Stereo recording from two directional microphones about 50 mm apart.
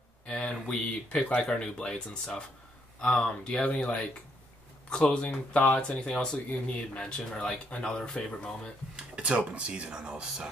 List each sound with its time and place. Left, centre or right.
0.3 s a sound: left
1.5 s speech: centre
8.9 s speech: centre